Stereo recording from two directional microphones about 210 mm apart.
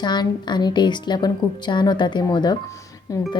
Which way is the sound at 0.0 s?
20° left (ahead or behind).